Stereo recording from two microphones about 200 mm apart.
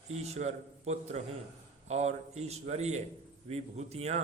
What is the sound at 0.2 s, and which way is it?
A man's voice, 35° right (ahead or behind).